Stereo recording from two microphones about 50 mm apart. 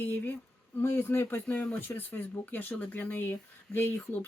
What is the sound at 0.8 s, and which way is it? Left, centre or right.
Speech, left.